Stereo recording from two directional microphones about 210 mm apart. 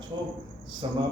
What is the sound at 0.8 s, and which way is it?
Speech, 25° right (ahead or behind).